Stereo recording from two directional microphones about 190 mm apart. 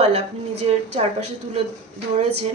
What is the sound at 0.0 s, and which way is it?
A woman's voice, 35° right (ahead or behind).